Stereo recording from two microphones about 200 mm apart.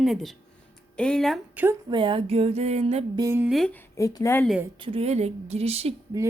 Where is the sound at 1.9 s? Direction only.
25° right (ahead or behind).